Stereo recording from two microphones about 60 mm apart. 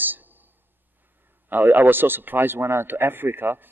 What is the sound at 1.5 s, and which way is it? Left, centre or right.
Speech, right.